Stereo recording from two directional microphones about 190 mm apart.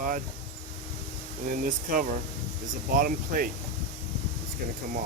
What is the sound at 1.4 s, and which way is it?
Speech, 45° right (ahead or behind).